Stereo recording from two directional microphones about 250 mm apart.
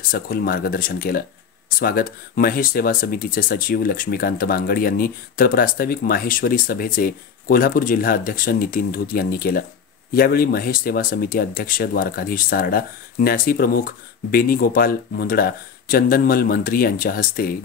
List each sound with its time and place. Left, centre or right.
0.1 s speech: left